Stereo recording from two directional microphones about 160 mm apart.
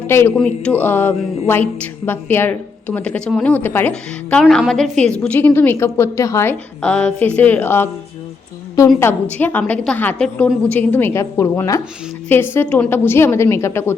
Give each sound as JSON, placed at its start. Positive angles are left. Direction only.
{"t": 0.1, "sound": "speech", "side_deg": 15}
{"t": 9.4, "sound": "speech", "side_deg": 10}